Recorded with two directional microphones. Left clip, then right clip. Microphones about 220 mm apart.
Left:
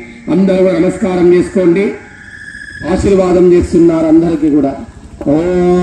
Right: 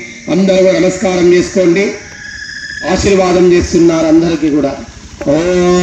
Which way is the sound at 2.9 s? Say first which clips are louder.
Even; 50° left (ahead or behind).